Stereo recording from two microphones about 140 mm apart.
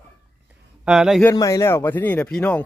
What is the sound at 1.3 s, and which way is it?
Speech, 25° left (ahead or behind).